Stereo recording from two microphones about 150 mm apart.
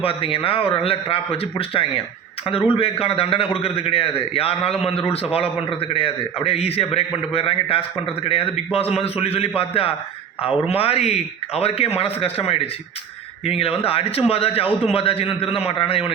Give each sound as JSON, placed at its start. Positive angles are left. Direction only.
{"t": 0.0, "sound": "a man's voice", "side_deg": 40}